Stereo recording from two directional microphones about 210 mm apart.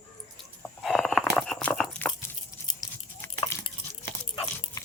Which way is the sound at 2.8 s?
15° left (ahead or behind).